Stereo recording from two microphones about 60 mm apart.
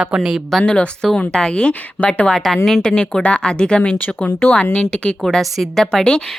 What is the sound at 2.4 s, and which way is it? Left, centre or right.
A woman's voice, centre.